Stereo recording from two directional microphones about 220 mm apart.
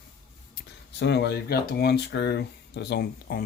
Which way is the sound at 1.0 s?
50° left (ahead or behind).